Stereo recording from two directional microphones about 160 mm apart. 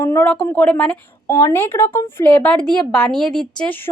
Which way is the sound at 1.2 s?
15° left (ahead or behind).